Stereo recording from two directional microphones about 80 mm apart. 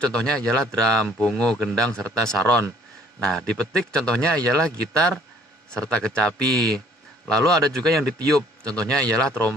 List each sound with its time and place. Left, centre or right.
0.0 s a man's voice: centre